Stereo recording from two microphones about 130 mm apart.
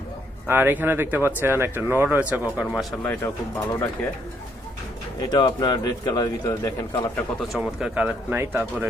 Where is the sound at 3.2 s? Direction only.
20° left (ahead or behind).